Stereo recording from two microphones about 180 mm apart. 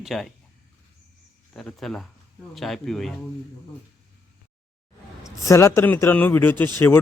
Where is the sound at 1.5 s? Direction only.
Centre (ahead or behind).